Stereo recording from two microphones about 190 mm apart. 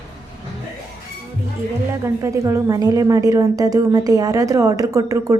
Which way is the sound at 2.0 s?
15° right (ahead or behind).